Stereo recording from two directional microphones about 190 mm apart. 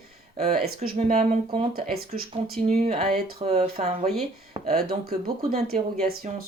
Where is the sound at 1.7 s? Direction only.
50° right (ahead or behind).